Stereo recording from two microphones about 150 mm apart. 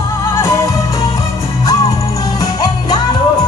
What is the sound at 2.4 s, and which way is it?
Jingle bell, 25° left (ahead or behind).